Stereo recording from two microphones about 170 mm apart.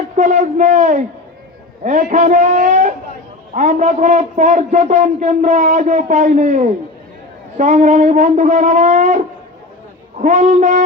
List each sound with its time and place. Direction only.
0.2 s a man's voice: 45° right (ahead or behind)